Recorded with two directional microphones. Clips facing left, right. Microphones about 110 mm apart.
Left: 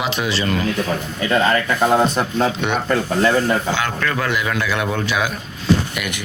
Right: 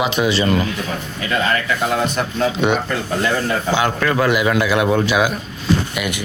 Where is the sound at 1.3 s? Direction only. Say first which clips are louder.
Left 2 dB; 35° left (ahead or behind).